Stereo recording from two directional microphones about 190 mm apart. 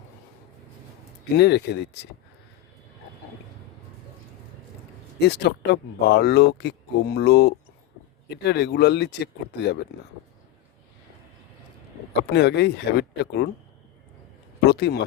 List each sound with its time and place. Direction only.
1.4 s speech: 60° left (ahead or behind)
5.2 s speech: 60° left (ahead or behind)
12.3 s speech: 60° left (ahead or behind)
14.6 s speech: 60° left (ahead or behind)